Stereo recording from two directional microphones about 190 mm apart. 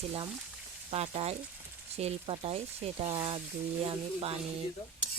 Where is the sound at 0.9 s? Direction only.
30° right (ahead or behind).